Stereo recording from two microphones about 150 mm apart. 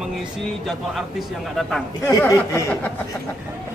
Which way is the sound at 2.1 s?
20° left (ahead or behind).